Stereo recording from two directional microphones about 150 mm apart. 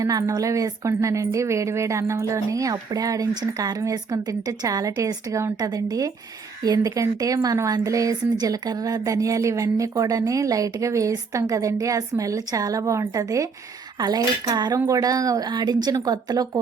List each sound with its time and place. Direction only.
0.0 s speech: 25° right (ahead or behind)